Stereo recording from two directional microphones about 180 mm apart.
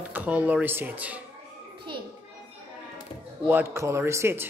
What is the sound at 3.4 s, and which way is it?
Speech, 10° right (ahead or behind).